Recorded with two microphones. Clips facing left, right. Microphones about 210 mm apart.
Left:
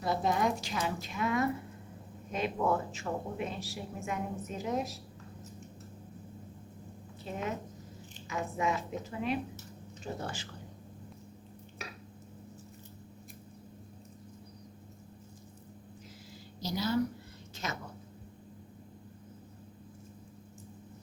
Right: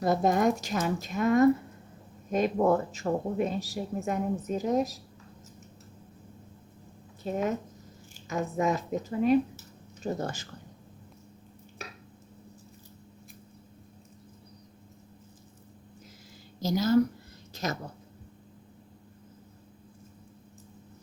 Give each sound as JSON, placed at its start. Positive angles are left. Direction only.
{"t": 0.0, "sound": "a woman's voice", "side_deg": -45}
{"t": 7.3, "sound": "a woman's voice", "side_deg": -45}
{"t": 16.6, "sound": "a woman's voice", "side_deg": -45}
{"t": 17.5, "sound": "a sound", "side_deg": -40}